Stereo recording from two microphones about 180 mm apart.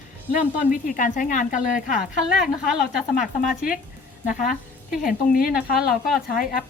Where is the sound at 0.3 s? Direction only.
50° left (ahead or behind).